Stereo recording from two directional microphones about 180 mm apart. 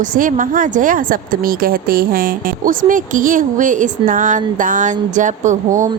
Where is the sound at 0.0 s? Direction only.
50° right (ahead or behind).